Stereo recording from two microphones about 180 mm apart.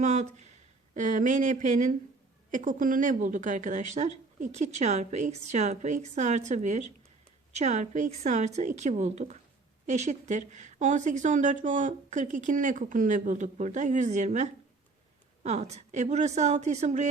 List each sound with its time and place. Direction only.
0.0 s a woman's voice: 40° right (ahead or behind)